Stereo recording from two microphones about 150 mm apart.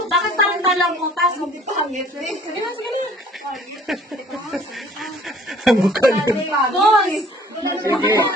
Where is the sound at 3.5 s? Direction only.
Centre (ahead or behind).